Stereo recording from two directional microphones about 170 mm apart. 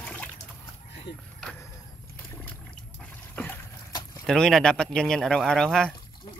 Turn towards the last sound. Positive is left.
turn(degrees=5)  # may be behind; listen again after turning